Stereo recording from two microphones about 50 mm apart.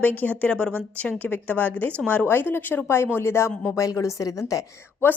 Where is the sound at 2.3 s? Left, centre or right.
Left.